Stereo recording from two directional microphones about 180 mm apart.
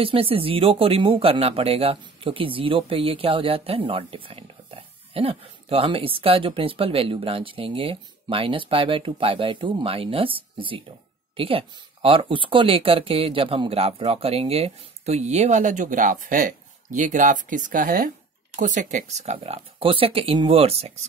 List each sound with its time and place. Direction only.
0.0 s speech: 30° right (ahead or behind)